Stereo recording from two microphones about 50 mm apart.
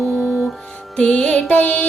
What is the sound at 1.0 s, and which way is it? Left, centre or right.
Music, left.